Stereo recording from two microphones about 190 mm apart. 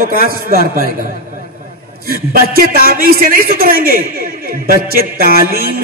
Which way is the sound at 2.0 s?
50° right (ahead or behind).